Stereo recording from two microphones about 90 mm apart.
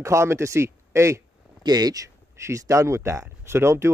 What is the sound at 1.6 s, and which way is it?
Speech, 50° right (ahead or behind).